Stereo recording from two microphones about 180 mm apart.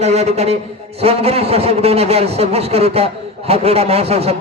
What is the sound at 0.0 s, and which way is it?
A man's voice, 40° right (ahead or behind).